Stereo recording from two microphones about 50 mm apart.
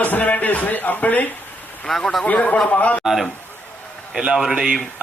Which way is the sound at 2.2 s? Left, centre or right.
Left.